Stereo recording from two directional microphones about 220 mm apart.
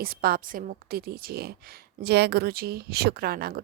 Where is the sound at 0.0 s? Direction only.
45° right (ahead or behind).